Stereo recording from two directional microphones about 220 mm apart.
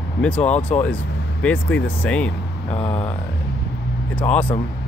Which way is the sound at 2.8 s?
25° left (ahead or behind).